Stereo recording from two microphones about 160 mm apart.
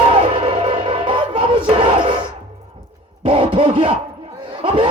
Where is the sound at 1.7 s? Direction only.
30° right (ahead or behind).